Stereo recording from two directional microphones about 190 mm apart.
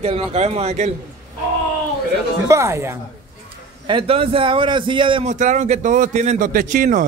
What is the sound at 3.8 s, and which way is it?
A man's voice, 30° right (ahead or behind).